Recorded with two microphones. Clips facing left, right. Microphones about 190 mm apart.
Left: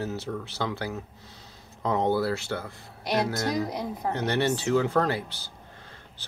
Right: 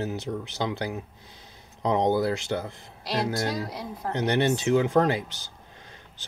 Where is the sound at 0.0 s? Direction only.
15° right (ahead or behind).